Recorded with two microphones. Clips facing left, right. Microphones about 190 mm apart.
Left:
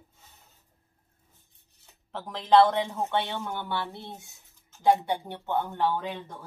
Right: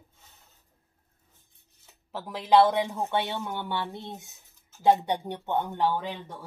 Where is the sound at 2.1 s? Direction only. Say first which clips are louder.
Even; 10° right (ahead or behind).